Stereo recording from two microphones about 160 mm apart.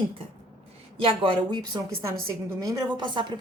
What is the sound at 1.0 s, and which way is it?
A woman's voice, 30° right (ahead or behind).